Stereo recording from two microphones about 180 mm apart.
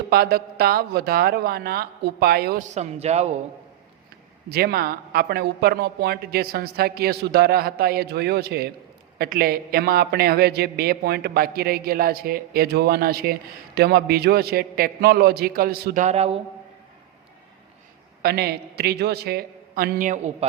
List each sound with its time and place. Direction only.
0.1 s speech: 60° right (ahead or behind)
2.6 s a man's voice: 40° right (ahead or behind)
4.4 s speech: 60° right (ahead or behind)
16.0 s a man's voice: 35° right (ahead or behind)
18.2 s speech: 60° right (ahead or behind); by 20.5 s 40° right (ahead or behind)